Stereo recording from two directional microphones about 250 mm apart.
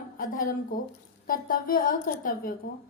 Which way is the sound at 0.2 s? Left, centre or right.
Left.